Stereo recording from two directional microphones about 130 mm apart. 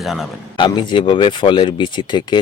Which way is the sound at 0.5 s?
35° left (ahead or behind).